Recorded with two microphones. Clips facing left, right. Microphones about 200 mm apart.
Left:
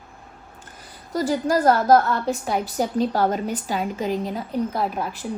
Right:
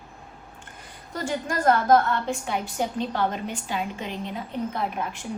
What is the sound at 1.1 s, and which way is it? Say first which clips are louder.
A woman's voice: left 7 dB; 35° left (ahead or behind).